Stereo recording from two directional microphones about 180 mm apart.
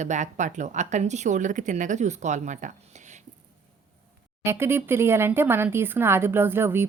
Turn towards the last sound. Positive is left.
turn(degrees=-15)  # may be behind; listen again after turning